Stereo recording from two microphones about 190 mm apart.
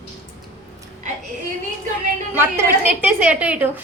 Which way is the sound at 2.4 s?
10° right (ahead or behind).